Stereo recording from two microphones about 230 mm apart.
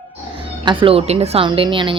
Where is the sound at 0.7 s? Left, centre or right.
Right.